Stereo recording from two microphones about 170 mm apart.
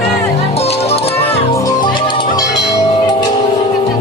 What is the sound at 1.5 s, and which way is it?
Music, 20° left (ahead or behind).